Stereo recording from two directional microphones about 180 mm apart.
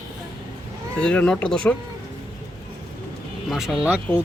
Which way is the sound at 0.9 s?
5° left (ahead or behind).